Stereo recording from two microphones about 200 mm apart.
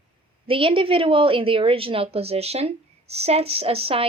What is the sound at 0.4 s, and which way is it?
A woman's voice, 25° right (ahead or behind).